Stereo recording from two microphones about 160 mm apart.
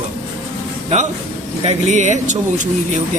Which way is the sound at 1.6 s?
45° right (ahead or behind).